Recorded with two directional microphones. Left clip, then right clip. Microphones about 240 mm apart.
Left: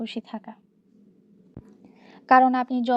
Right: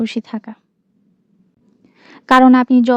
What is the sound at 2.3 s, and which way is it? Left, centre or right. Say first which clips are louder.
Speech: right 7 dB; right.